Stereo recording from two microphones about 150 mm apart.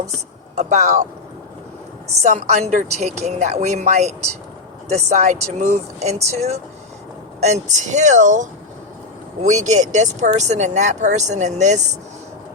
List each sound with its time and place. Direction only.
0.5 s speech: 50° right (ahead or behind)
2.2 s speech: 50° right (ahead or behind)